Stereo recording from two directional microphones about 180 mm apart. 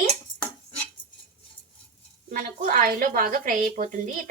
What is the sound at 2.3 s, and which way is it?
Speech, 50° right (ahead or behind).